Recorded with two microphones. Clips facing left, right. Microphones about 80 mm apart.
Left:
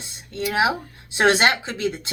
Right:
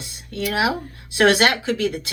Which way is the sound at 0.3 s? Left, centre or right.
Left.